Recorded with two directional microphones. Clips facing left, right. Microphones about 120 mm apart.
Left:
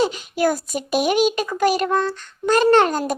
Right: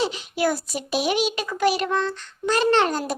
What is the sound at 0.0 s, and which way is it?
A child's voice, 45° left (ahead or behind).